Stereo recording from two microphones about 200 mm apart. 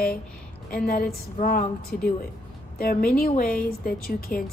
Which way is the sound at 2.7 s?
50° left (ahead or behind).